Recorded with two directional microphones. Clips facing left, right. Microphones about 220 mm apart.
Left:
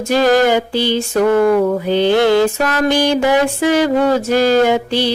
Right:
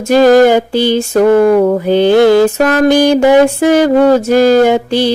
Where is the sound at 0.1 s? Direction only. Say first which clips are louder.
Right 7 dB; 50° right (ahead or behind).